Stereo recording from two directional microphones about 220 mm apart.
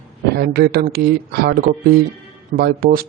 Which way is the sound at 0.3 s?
45° right (ahead or behind).